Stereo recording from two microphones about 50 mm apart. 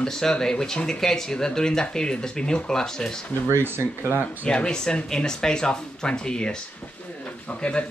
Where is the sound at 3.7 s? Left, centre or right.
Right.